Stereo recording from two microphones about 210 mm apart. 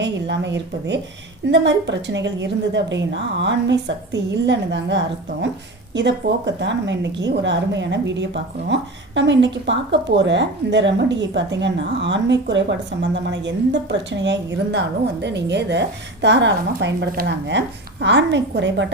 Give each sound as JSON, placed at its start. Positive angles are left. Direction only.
{"t": 0.0, "sound": "speech", "side_deg": -55}